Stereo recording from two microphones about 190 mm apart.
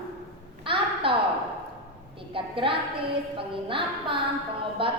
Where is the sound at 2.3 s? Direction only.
25° right (ahead or behind).